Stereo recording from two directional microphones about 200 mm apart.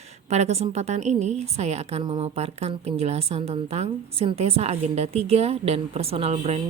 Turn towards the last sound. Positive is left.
turn(degrees=-30)  # may be behind; listen again after turning